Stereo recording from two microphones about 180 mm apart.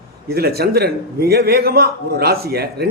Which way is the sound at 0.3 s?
60° right (ahead or behind).